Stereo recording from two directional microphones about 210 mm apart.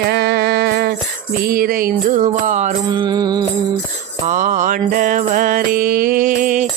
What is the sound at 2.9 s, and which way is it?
Music, 20° right (ahead or behind).